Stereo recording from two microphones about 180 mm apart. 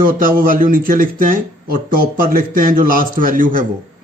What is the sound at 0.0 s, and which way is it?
Speech, 50° right (ahead or behind).